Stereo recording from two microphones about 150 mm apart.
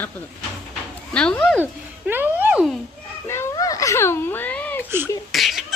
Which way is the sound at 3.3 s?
20° left (ahead or behind).